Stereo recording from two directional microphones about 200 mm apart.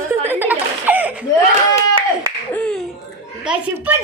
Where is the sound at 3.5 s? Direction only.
10° right (ahead or behind).